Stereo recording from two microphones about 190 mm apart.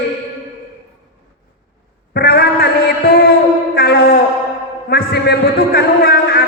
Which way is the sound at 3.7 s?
55° left (ahead or behind).